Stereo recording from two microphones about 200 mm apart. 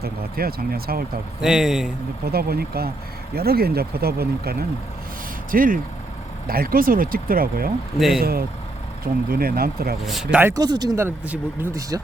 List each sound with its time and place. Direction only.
0.0 s speech: 50° right (ahead or behind)
1.4 s a man's voice: 5° right (ahead or behind)
2.2 s speech: 50° right (ahead or behind)
7.9 s a man's voice: centre (ahead or behind)
8.2 s speech: 50° right (ahead or behind)
10.3 s speech: 15° right (ahead or behind)